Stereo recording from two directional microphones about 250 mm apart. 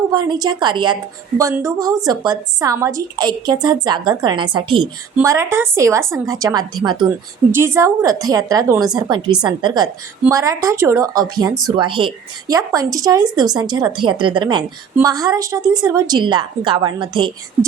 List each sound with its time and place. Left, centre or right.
0.3 s speech: centre